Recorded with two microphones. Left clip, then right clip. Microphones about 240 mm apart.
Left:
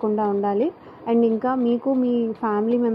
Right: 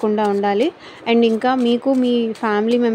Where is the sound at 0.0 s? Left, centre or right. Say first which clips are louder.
Right 4 dB; right.